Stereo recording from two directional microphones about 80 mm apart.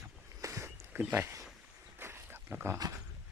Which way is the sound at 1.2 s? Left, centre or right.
Right.